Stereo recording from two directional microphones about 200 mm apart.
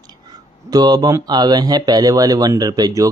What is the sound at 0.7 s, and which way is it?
Speech, 20° right (ahead or behind).